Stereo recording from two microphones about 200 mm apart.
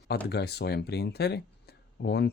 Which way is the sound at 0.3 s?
55° left (ahead or behind).